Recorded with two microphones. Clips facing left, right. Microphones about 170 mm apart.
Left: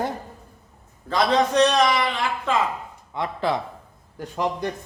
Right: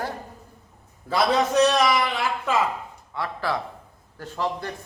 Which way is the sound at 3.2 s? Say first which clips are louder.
Left 3 dB; 20° left (ahead or behind).